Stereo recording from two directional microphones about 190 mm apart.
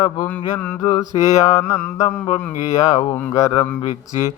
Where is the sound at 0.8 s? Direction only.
20° left (ahead or behind).